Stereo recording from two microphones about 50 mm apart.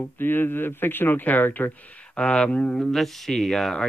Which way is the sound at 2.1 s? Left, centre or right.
Centre.